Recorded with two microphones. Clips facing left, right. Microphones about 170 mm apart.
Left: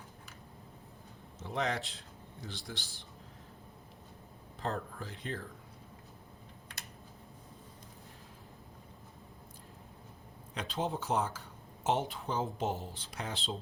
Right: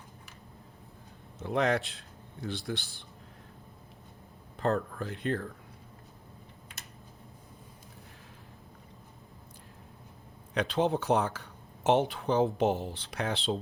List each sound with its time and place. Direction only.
1.4 s speech: 60° right (ahead or behind)
4.6 s speech: 65° right (ahead or behind)
10.5 s speech: 70° right (ahead or behind)